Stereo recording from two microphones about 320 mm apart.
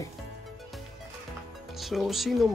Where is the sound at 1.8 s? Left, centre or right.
Centre.